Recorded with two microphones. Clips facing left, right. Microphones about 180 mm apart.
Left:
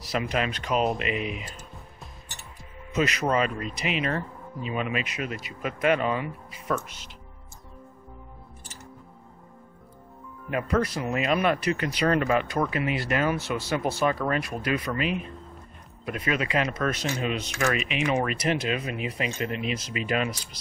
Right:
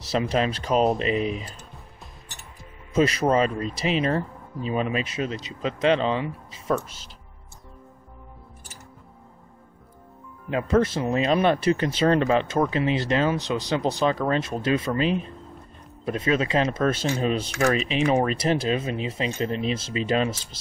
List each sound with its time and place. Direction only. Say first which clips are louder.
0.1 s speech: right 4 dB; 30° right (ahead or behind)
2.9 s speech: right 4 dB; 30° right (ahead or behind)
10.5 s speech: right 4 dB; 25° right (ahead or behind)